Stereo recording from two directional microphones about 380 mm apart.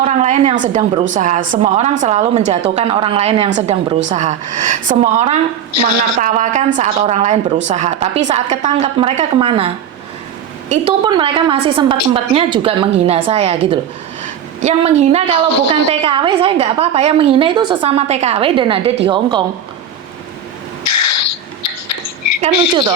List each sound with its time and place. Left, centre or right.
0.0 s a woman's voice: centre
5.7 s a woman's voice: left
6.1 s a woman's voice: centre
20.8 s a sound: left